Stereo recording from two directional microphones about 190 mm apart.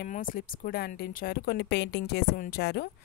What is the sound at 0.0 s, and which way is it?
A woman's voice, 45° left (ahead or behind).